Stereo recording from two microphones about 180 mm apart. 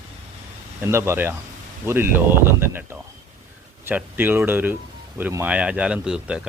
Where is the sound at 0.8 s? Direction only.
15° right (ahead or behind).